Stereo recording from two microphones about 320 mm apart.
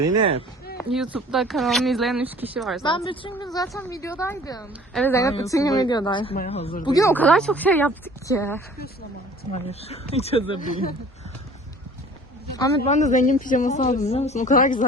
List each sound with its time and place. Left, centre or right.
0.1 s speech: centre
0.9 s speech: centre
2.8 s speech: centre
9.4 s speech: centre
12.9 s speech: left